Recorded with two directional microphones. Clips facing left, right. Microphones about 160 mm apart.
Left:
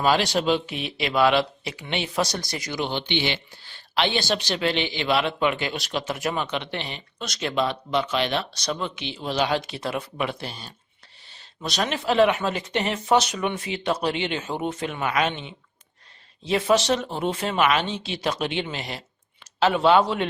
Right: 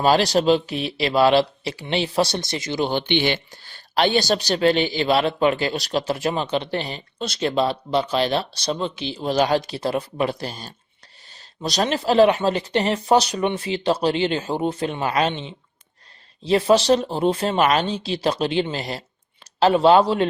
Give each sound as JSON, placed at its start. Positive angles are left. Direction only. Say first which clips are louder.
{"t": 0.0, "sound": "a woman's voice", "louder": "right 4 dB", "side_deg": -35}
{"t": 2.8, "sound": "a woman's voice", "louder": "right 5 dB", "side_deg": -50}